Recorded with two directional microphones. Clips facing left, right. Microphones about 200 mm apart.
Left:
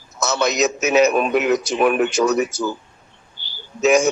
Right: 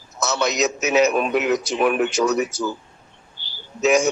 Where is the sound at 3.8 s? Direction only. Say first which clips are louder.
Left 2 dB; 50° left (ahead or behind).